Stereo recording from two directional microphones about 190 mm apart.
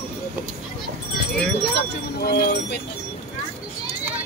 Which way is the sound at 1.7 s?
55° left (ahead or behind).